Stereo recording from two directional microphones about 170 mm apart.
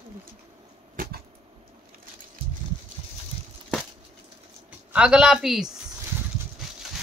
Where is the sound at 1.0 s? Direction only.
55° right (ahead or behind).